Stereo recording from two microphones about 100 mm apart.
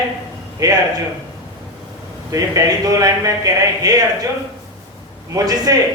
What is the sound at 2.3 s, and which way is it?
A man's voice, 35° right (ahead or behind).